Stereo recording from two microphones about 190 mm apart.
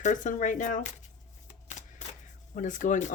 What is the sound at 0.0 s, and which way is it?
Speech, 40° left (ahead or behind).